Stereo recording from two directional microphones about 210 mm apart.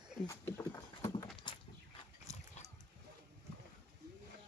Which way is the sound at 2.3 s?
15° right (ahead or behind).